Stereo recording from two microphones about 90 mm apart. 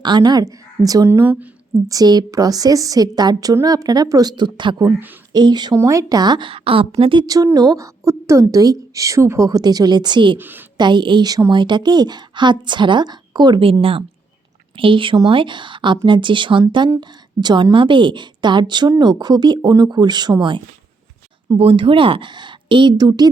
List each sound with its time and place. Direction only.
0.0 s a woman's voice: 55° right (ahead or behind)
1.0 s a woman's voice: 25° right (ahead or behind)
1.9 s a woman's voice: 45° right (ahead or behind)
4.9 s a woman's voice: 20° right (ahead or behind)
5.3 s a woman's voice: 50° right (ahead or behind)
5.7 s a woman's voice: 35° right (ahead or behind); by 6.5 s 55° right (ahead or behind)
6.5 s a woman's voice: 90° right
7.2 s a woman's voice: 45° right (ahead or behind)
9.5 s a woman's voice: 45° right (ahead or behind)
10.3 s a woman's voice: 20° right (ahead or behind)
10.8 s a woman's voice: 60° right (ahead or behind)
14.8 s a woman's voice: 75° right (ahead or behind); by 20.6 s 60° right (ahead or behind)
21.6 s a woman's voice: 85° right; by 23.3 s 45° right (ahead or behind)